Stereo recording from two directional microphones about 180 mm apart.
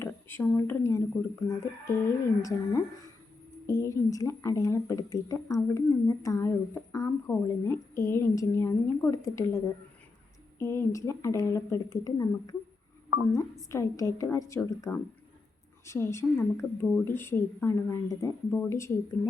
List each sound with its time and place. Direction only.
0.0 s speech: 15° left (ahead or behind)
2.0 s a woman's voice: 15° left (ahead or behind)
10.6 s a woman's voice: 15° left (ahead or behind)
13.7 s a woman's voice: 15° left (ahead or behind)